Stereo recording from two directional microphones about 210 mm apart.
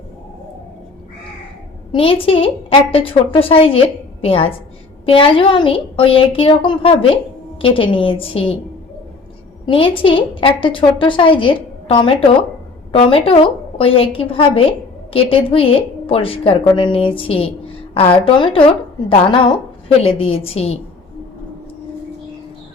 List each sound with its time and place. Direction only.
1.9 s a woman's voice: 25° left (ahead or behind)
9.6 s a woman's voice: 25° left (ahead or behind)